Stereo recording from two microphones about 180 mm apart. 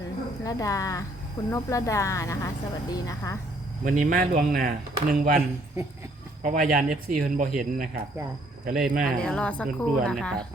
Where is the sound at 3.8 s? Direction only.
50° right (ahead or behind).